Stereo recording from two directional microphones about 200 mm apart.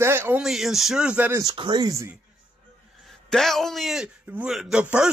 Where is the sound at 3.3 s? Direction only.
Centre (ahead or behind).